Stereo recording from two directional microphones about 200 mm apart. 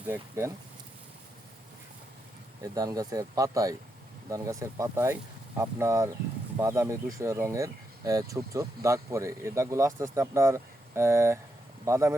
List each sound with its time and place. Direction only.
0.1 s speech: 15° right (ahead or behind)
2.7 s speech: 20° right (ahead or behind)